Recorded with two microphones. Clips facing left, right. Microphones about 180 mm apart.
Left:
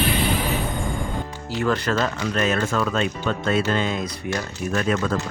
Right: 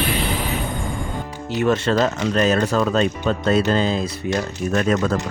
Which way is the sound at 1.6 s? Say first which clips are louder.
Right 4 dB; 25° right (ahead or behind).